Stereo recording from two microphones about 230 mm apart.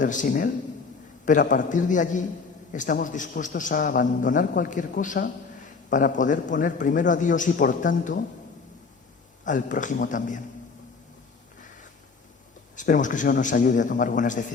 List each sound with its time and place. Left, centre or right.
0.0 s a man's voice: left
9.4 s a man's voice: left
12.7 s a man's voice: left